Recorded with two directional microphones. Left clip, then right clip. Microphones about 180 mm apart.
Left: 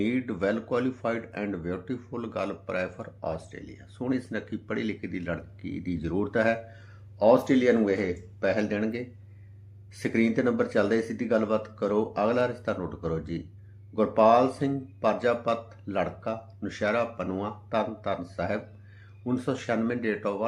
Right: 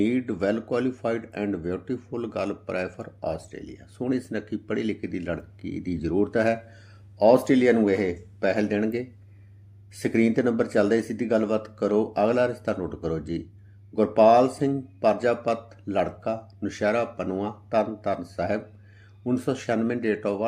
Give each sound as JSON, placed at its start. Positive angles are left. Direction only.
{"t": 0.0, "sound": "speech", "side_deg": -40}
{"t": 7.2, "sound": "speech", "side_deg": -50}